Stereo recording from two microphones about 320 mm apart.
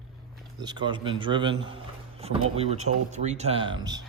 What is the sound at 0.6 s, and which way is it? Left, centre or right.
Speech, centre.